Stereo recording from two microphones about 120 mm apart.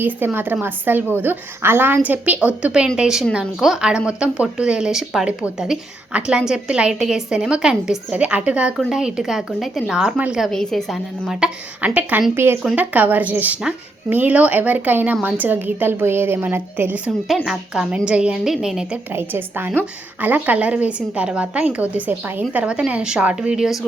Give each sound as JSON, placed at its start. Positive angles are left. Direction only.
{"t": 0.3, "sound": "a woman's voice", "side_deg": -15}
{"t": 17.2, "sound": "a woman's voice", "side_deg": 0}
{"t": 19.1, "sound": "speech", "side_deg": -15}